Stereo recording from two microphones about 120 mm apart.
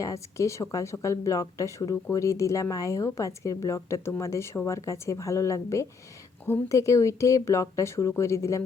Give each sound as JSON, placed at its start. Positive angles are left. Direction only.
{"t": 0.0, "sound": "speech", "side_deg": 25}